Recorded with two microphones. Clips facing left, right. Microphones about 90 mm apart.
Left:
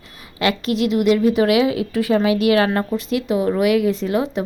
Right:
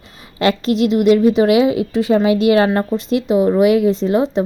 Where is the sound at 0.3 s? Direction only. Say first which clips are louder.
Right 4 dB; 30° right (ahead or behind).